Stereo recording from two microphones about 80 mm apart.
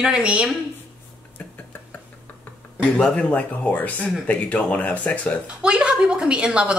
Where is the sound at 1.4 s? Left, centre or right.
Left.